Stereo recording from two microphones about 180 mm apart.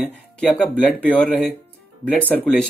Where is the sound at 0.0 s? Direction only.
5° left (ahead or behind).